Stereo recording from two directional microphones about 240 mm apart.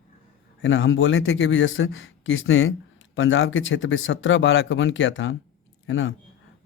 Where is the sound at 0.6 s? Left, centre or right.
Left.